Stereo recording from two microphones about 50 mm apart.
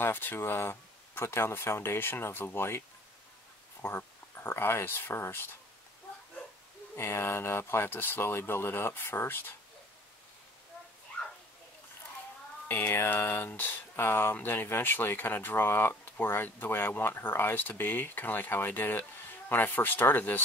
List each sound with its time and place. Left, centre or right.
0.0 s speech: left
3.8 s speech: left
7.0 s speech: left
12.6 s speech: left